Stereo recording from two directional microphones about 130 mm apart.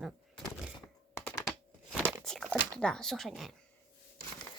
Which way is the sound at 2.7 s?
5° left (ahead or behind).